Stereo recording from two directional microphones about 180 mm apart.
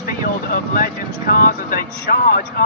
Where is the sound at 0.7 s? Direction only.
50° left (ahead or behind).